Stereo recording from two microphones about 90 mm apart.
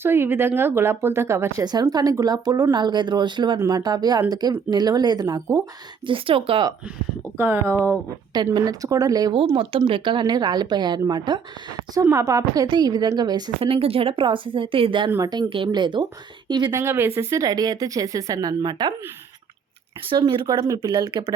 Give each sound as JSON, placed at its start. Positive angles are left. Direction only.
{"t": 0.0, "sound": "speech", "side_deg": -25}
{"t": 1.6, "sound": "a woman's voice", "side_deg": -50}
{"t": 3.7, "sound": "a woman's voice", "side_deg": -45}
{"t": 6.1, "sound": "speech", "side_deg": -80}
{"t": 7.3, "sound": "speech", "side_deg": -25}
{"t": 8.5, "sound": "a woman's voice", "side_deg": -45}
{"t": 9.6, "sound": "speech", "side_deg": -75}
{"t": 12.1, "sound": "a woman's voice", "side_deg": -40}
{"t": 13.6, "sound": "speech", "side_deg": -90}
{"t": 15.2, "sound": "speech", "side_deg": -50}
{"t": 16.7, "sound": "speech", "side_deg": -25}
{"t": 20.1, "sound": "speech", "side_deg": -70}
{"t": 20.7, "sound": "a woman's voice", "side_deg": -55}